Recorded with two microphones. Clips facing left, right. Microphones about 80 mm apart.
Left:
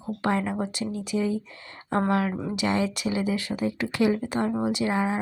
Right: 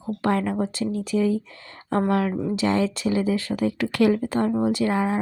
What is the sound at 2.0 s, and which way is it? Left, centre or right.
Speech, left.